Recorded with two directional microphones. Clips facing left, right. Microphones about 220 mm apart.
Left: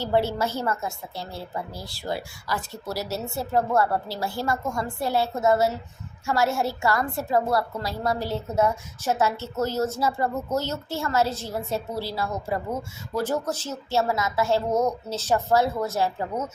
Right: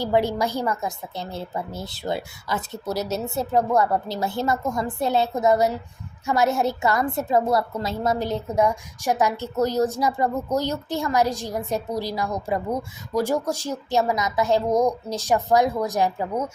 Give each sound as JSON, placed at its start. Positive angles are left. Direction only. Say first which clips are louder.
{"t": 0.0, "sound": "a woman's voice", "louder": "right 2 dB", "side_deg": -15}